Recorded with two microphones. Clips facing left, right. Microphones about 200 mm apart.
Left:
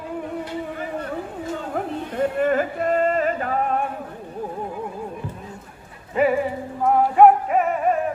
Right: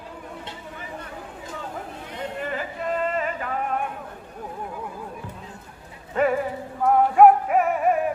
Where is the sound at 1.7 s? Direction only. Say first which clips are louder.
Left 9 dB; 60° left (ahead or behind); by 3.8 s 40° left (ahead or behind).